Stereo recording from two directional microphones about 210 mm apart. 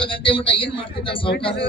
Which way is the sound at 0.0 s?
25° left (ahead or behind).